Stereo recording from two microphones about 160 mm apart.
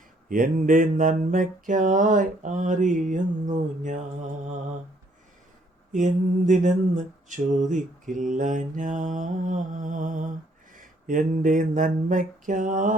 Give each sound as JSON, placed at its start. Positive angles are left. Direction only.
{"t": 0.3, "sound": "mantra", "side_deg": -55}
{"t": 5.9, "sound": "a sound", "side_deg": -50}
{"t": 10.8, "sound": "mantra", "side_deg": -55}